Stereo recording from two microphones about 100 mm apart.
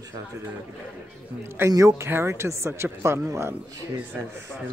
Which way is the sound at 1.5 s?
35° right (ahead or behind).